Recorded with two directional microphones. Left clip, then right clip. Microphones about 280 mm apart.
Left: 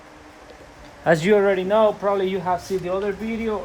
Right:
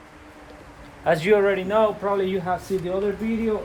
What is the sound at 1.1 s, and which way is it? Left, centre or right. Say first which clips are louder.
A man's voice: left 2 dB; left.